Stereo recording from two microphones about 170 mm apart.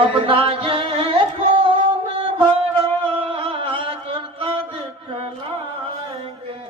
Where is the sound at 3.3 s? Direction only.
30° right (ahead or behind).